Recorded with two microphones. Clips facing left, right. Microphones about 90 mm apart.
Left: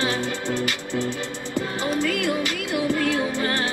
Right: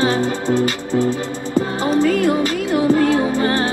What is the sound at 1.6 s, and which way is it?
Music, 40° right (ahead or behind).